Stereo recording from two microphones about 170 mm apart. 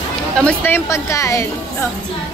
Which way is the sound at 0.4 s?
10° left (ahead or behind).